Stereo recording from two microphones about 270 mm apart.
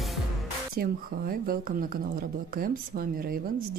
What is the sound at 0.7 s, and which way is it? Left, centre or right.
Speech, right.